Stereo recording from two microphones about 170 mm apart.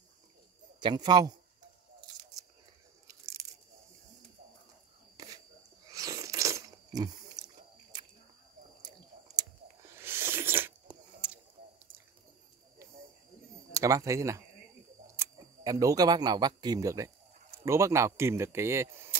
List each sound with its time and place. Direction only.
0.7 s speech: 25° right (ahead or behind)
3.1 s biting: 15° right (ahead or behind)
5.1 s a sound: 20° right (ahead or behind)
8.8 s chewing: 20° right (ahead or behind)
9.9 s a sound: 15° right (ahead or behind)
13.7 s speech: 20° right (ahead or behind)